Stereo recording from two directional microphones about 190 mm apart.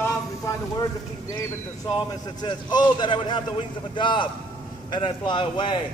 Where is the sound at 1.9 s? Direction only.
25° left (ahead or behind).